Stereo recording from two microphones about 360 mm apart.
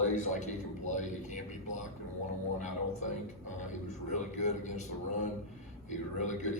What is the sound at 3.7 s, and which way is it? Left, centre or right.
A man's voice, centre.